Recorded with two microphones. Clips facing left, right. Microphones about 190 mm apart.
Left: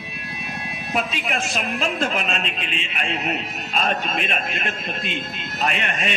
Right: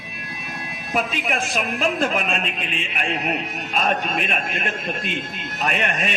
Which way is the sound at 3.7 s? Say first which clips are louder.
Right 1 dB; 50° right (ahead or behind).